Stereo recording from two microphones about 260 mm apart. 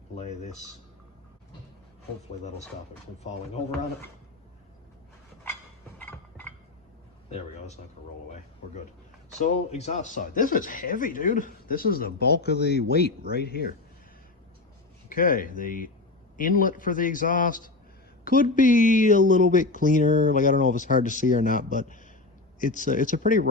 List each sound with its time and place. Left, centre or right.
0.2 s speech: left
6.1 s a sound: centre
7.3 s speech: left
9.4 s a man's voice: left
15.1 s a man's voice: left